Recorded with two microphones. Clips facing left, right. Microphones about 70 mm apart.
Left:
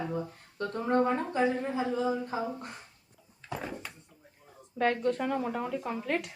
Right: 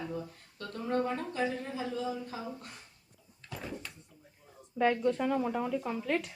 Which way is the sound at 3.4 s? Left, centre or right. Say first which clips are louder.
Left 4 dB; left.